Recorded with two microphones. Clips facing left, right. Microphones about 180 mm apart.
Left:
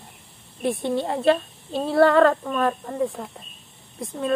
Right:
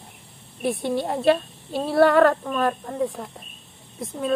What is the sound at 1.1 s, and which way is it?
Speech, centre (ahead or behind).